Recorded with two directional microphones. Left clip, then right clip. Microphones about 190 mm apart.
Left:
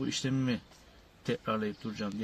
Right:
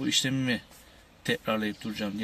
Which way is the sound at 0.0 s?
45° left (ahead or behind).